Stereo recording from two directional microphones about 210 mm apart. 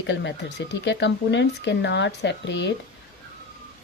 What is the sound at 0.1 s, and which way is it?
Speech, 55° left (ahead or behind).